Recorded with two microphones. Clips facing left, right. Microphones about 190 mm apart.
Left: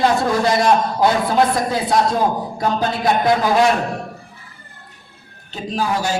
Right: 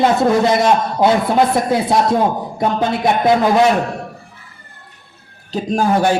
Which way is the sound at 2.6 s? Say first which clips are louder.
Right 3 dB; 25° right (ahead or behind).